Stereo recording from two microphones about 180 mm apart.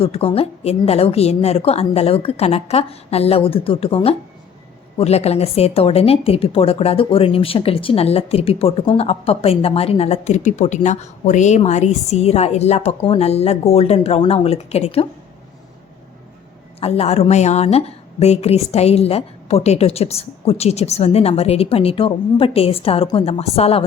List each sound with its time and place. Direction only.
0.0 s a woman's voice: 30° left (ahead or behind)
16.8 s a woman's voice: 35° left (ahead or behind)